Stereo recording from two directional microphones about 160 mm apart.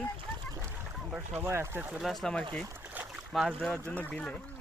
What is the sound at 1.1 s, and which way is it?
Speech, 10° right (ahead or behind).